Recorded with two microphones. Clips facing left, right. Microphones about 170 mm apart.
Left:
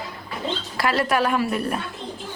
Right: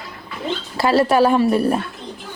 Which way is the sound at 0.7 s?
30° right (ahead or behind).